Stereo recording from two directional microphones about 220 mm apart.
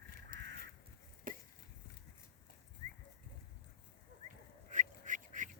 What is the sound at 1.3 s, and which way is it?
Chop, 40° right (ahead or behind).